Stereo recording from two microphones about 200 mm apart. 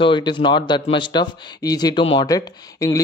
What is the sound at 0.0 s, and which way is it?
Speech, 25° left (ahead or behind).